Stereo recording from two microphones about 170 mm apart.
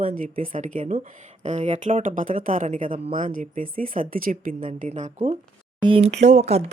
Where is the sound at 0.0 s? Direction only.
55° right (ahead or behind).